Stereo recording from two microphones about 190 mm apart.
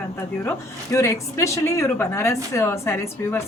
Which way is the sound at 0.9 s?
15° left (ahead or behind).